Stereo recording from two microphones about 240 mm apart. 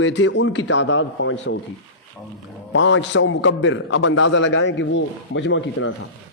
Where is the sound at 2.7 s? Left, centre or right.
Left.